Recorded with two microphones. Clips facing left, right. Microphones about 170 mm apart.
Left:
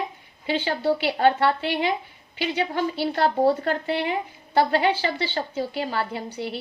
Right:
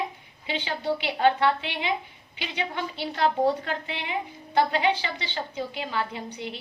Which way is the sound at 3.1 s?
40° left (ahead or behind).